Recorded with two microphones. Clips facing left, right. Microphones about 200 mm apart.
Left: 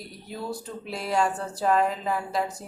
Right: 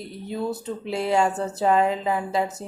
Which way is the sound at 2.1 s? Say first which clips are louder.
Right 3 dB; 25° right (ahead or behind).